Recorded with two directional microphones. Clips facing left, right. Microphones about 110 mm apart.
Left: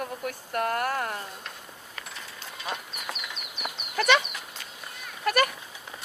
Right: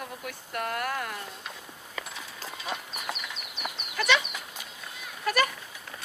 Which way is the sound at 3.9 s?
55° left (ahead or behind).